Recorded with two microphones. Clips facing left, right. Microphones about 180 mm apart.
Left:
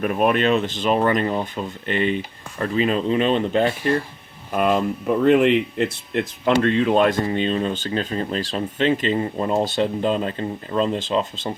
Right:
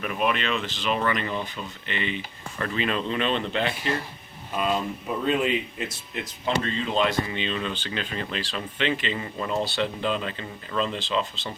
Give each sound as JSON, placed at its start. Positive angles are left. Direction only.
{"t": 0.0, "sound": "speech", "side_deg": 45}
{"t": 4.5, "sound": "speech", "side_deg": 60}